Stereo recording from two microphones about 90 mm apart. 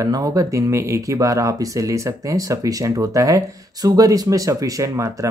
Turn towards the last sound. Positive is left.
turn(degrees=-40)  # may be behind; listen again after turning